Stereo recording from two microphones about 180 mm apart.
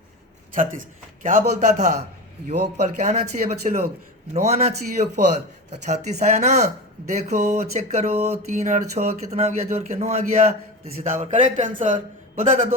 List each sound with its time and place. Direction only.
0.5 s a man's voice: 50° right (ahead or behind)
2.7 s a sound: 40° right (ahead or behind)
11.0 s a man's voice: 45° right (ahead or behind)